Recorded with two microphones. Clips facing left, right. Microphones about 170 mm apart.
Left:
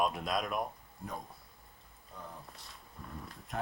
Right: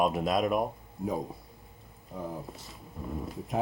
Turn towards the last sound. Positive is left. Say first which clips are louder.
# right 9 dB
turn(degrees=0)  # may be behind; listen again after turning